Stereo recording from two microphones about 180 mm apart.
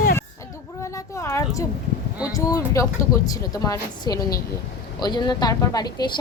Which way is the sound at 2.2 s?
20° left (ahead or behind).